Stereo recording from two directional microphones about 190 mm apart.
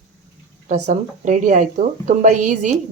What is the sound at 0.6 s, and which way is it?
A woman's voice, 40° right (ahead or behind).